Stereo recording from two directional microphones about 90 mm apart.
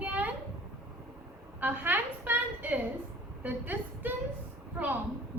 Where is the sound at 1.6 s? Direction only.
20° right (ahead or behind).